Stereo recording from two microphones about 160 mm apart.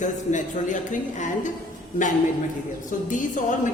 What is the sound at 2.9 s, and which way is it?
Speech, 55° left (ahead or behind).